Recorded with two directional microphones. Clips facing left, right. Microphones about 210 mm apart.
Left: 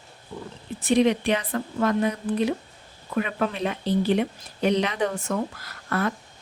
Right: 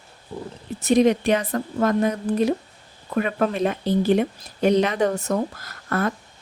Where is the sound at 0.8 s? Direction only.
45° right (ahead or behind).